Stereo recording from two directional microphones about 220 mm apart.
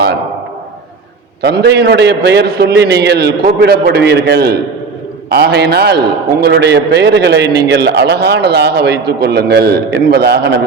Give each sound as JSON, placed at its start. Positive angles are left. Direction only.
{"t": 1.4, "sound": "a man's voice", "side_deg": -50}